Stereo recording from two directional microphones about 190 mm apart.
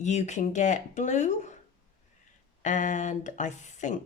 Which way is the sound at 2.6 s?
40° left (ahead or behind).